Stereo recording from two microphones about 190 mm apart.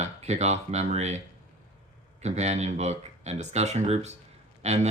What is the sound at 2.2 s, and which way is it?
Speech, 35° right (ahead or behind).